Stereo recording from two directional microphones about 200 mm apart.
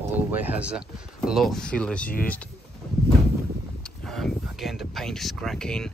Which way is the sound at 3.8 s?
Centre (ahead or behind).